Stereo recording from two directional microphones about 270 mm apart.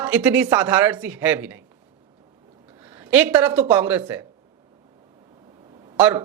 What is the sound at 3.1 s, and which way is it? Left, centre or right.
Speech, centre.